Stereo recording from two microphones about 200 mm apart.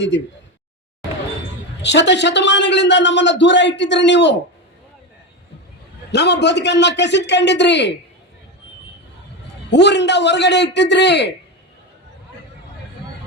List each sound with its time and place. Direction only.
1.8 s a man's voice: 60° left (ahead or behind)
6.1 s a man's voice: 55° left (ahead or behind)
9.6 s a man's voice: 60° left (ahead or behind)